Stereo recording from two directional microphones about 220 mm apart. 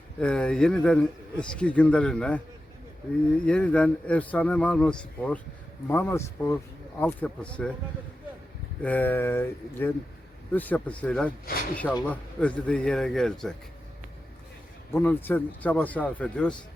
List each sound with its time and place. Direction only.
0.2 s speech: 5° left (ahead or behind)
3.4 s speech: 5° left (ahead or behind)
8.8 s speech: 5° left (ahead or behind)
11.5 s speech: 40° left (ahead or behind)
12.0 s speech: 5° left (ahead or behind)
14.8 s speech: 10° left (ahead or behind)